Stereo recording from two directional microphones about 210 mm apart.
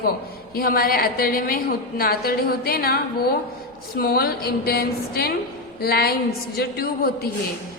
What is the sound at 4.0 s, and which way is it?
A woman's voice, 45° left (ahead or behind).